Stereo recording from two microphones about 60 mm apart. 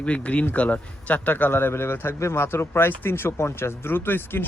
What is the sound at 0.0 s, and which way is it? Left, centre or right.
Speech, left.